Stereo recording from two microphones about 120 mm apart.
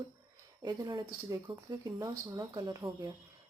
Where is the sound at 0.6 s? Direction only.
30° right (ahead or behind).